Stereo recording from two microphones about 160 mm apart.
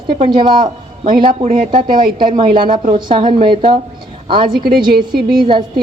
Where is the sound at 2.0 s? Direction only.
65° right (ahead or behind).